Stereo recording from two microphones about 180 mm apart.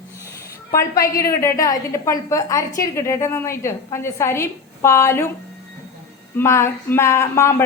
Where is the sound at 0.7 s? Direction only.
20° left (ahead or behind).